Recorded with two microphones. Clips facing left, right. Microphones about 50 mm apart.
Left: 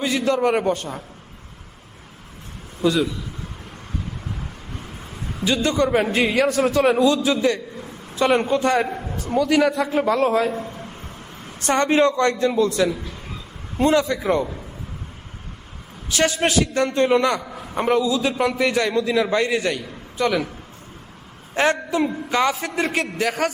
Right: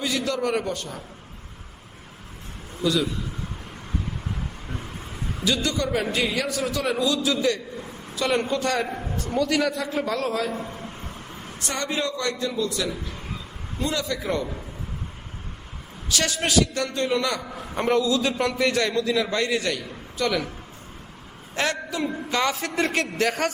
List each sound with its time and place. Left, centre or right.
0.0 s a man's voice: left
2.8 s a man's voice: left
5.5 s a man's voice: left
9.1 s a man's voice: centre
9.7 s a man's voice: left
11.6 s a man's voice: left
16.0 s a man's voice: left
17.7 s a man's voice: centre
21.5 s a man's voice: left
22.3 s a man's voice: centre